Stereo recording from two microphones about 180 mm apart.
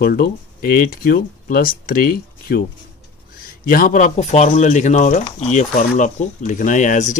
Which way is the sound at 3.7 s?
50° left (ahead or behind).